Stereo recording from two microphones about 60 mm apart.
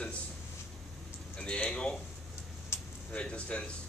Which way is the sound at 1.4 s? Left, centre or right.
Left.